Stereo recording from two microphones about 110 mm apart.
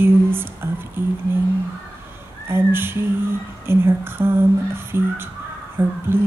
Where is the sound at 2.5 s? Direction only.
20° right (ahead or behind).